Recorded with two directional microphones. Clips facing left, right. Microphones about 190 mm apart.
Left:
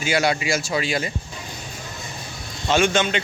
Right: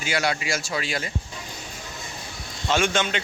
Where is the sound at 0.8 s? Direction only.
Centre (ahead or behind).